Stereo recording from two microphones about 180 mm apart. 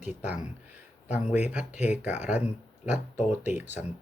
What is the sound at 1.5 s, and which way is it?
Speech, 5° right (ahead or behind).